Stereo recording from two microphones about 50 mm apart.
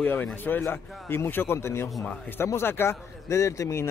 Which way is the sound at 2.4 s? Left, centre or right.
Left.